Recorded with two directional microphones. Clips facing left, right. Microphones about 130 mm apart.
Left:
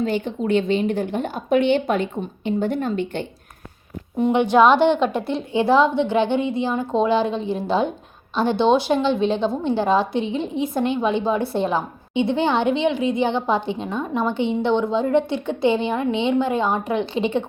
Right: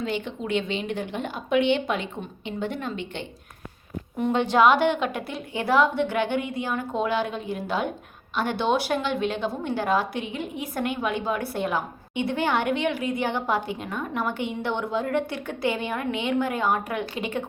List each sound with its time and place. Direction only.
0.0 s a woman's voice: 40° left (ahead or behind)
4.2 s a woman's voice: 15° left (ahead or behind)